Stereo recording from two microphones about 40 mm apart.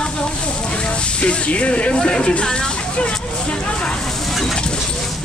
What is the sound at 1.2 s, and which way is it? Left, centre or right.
Speech, left.